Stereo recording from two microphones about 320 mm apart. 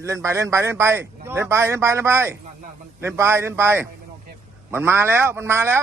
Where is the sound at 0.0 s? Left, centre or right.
Centre.